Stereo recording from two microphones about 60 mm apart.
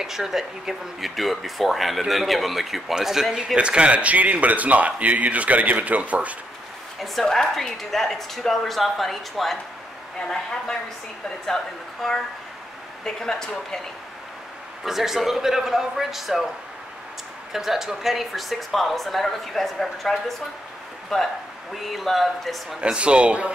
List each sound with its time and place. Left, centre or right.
0.0 s speech: centre
3.5 s speech: centre
7.0 s speech: centre
14.9 s speech: centre
17.5 s speech: centre
22.8 s speech: centre